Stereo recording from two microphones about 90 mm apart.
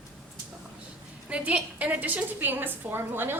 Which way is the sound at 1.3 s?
15° right (ahead or behind).